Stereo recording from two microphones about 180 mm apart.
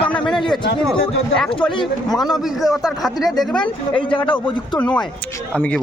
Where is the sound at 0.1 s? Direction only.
5° left (ahead or behind).